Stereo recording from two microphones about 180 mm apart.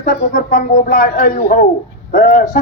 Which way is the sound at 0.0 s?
45° left (ahead or behind).